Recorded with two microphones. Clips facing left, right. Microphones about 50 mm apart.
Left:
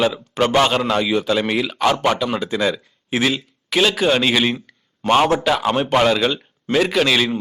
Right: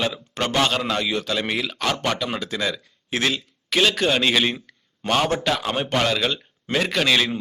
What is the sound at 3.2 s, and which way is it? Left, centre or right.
Speech, centre.